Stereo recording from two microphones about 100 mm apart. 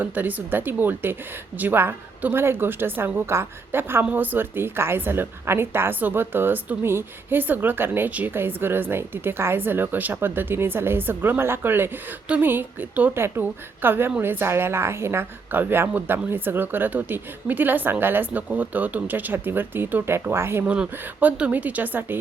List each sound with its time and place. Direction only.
0.0 s a woman's voice: 15° right (ahead or behind)